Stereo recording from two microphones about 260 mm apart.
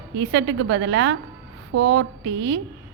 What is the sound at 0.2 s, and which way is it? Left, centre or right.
A woman's voice, right.